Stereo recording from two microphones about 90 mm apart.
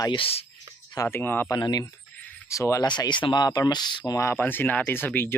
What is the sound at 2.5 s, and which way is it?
Speech, 35° left (ahead or behind).